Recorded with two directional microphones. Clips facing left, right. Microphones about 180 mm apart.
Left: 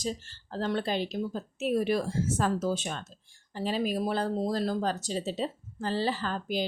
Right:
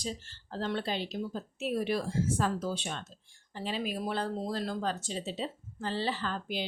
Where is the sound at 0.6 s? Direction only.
45° left (ahead or behind).